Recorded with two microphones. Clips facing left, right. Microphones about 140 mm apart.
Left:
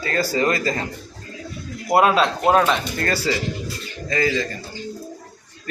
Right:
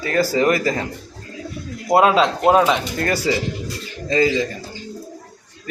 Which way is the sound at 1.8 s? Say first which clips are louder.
Right 2 dB; 20° right (ahead or behind).